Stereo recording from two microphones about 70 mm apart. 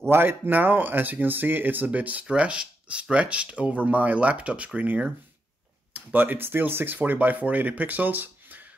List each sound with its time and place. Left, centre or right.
0.1 s speech: right